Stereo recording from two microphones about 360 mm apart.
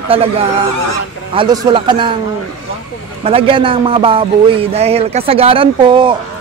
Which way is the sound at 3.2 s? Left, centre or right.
Centre.